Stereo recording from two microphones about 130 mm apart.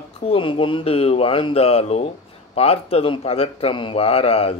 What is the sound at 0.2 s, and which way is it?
Speech, 45° left (ahead or behind).